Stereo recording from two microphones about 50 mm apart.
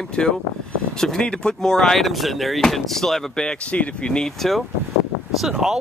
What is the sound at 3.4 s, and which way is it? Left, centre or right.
Speech, left.